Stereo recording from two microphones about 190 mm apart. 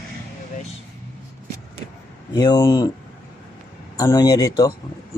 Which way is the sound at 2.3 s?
20° left (ahead or behind).